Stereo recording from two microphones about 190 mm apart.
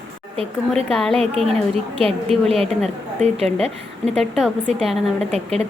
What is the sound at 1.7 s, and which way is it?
Speech, 30° right (ahead or behind).